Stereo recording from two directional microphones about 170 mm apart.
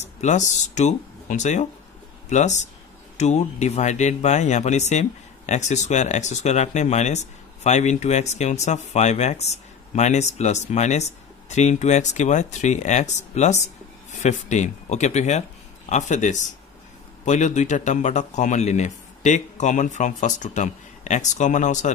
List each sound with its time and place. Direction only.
0.0 s speech: 45° left (ahead or behind)